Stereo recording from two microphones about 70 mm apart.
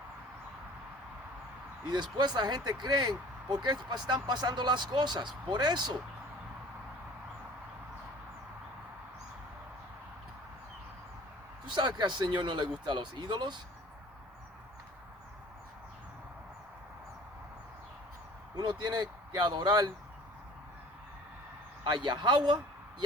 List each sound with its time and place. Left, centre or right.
1.9 s speech: right
11.8 s speech: right
18.5 s speech: right
21.8 s a man's voice: right